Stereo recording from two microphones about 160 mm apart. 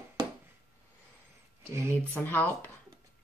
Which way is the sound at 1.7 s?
15° right (ahead or behind).